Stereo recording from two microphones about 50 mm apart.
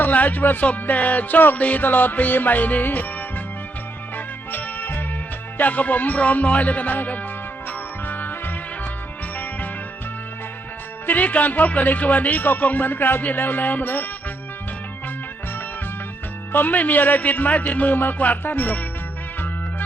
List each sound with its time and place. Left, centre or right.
0.0 s speech: left
4.5 s music: left
5.5 s speech: left
7.7 s music: left
11.0 s speech: left
16.5 s speech: left